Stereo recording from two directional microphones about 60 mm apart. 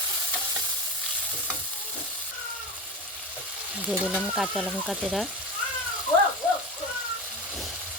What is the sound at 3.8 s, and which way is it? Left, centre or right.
Speech, right.